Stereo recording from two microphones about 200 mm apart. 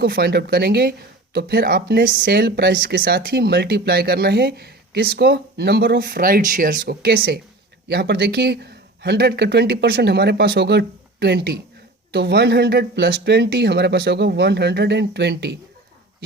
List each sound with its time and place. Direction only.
0.0 s speech: 55° right (ahead or behind)